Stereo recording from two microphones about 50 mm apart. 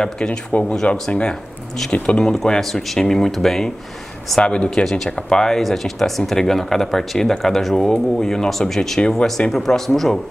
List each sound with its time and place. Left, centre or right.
0.0 s speech: centre
1.3 s speech: centre
4.4 s speech: centre
4.8 s speech: centre